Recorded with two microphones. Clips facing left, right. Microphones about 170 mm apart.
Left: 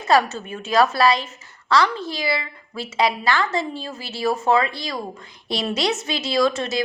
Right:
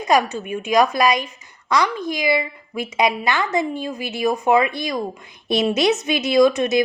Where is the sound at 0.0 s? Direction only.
15° right (ahead or behind).